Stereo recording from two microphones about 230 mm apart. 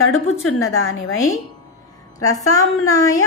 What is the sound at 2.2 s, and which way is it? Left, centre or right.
A woman's voice, centre.